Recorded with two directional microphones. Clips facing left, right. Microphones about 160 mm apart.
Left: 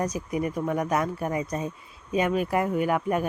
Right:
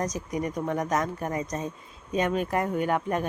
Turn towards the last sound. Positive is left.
turn(degrees=10)  # may be behind; listen again after turning